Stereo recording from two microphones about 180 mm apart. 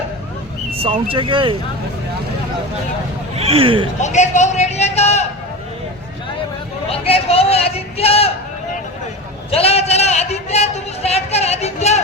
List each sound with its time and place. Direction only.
0.8 s speech: 30° right (ahead or behind)
3.3 s speech: 35° right (ahead or behind)
4.0 s speech: 40° left (ahead or behind)
6.9 s speech: 35° left (ahead or behind)
9.5 s a sound: 35° left (ahead or behind)